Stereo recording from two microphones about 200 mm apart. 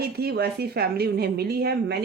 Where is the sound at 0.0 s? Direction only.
50° right (ahead or behind).